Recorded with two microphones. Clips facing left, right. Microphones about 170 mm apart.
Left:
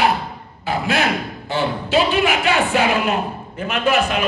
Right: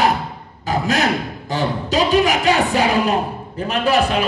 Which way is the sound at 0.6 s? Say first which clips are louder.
Right 1 dB; 40° right (ahead or behind).